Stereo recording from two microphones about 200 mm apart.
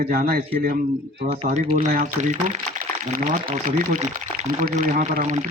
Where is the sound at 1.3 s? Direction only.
30° right (ahead or behind).